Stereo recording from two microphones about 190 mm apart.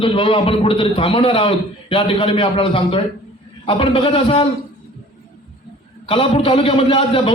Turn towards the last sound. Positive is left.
turn(degrees=30)  # may be behind; listen again after turning